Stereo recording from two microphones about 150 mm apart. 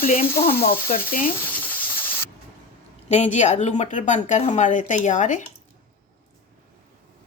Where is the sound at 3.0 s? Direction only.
45° left (ahead or behind).